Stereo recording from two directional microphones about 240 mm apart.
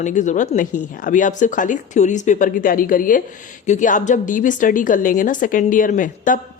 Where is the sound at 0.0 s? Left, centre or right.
Left.